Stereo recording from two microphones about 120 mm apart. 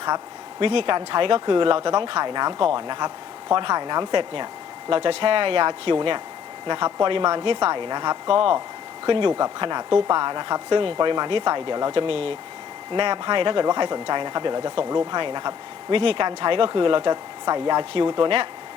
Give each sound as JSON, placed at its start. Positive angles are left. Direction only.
{"t": 0.6, "sound": "speech", "side_deg": -50}
{"t": 12.9, "sound": "speech", "side_deg": -40}